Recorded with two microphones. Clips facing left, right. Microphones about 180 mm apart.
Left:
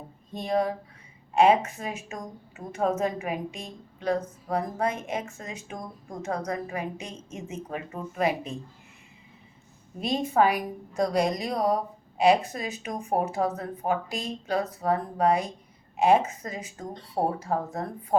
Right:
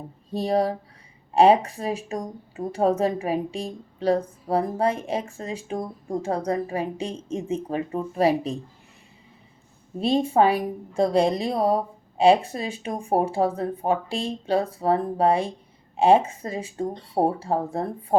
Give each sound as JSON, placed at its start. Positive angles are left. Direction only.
{"t": 0.3, "sound": "speech", "side_deg": -35}
{"t": 10.0, "sound": "a woman's voice", "side_deg": -30}